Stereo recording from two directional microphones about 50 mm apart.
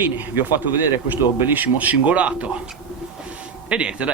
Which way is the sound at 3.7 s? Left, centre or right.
Right.